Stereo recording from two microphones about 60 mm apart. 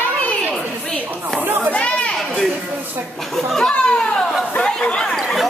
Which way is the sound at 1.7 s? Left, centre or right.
Left.